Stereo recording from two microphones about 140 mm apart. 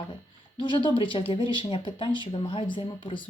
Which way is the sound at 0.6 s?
35° left (ahead or behind).